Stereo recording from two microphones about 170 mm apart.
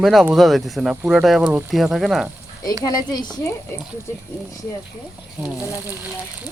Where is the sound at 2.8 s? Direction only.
25° left (ahead or behind).